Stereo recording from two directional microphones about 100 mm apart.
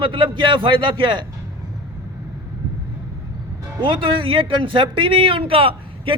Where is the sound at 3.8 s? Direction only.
55° right (ahead or behind).